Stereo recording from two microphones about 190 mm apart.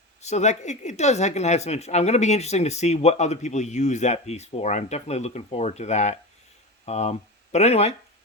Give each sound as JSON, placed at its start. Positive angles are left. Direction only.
{"t": 0.2, "sound": "speech", "side_deg": 35}